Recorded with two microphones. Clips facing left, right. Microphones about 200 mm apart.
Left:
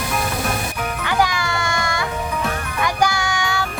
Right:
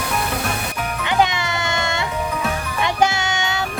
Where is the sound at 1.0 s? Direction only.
20° right (ahead or behind).